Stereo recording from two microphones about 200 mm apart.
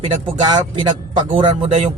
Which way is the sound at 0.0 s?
25° right (ahead or behind).